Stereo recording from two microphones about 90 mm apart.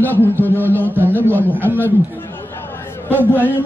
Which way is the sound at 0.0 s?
20° left (ahead or behind).